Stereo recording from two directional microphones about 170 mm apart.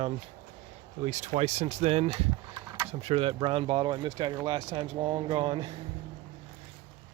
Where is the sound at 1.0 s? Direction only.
40° right (ahead or behind).